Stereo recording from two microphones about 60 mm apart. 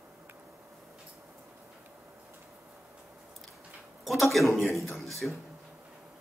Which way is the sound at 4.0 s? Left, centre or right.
Centre.